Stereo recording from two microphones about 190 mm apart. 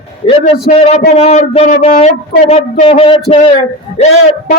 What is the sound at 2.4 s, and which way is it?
A man's voice, 30° left (ahead or behind).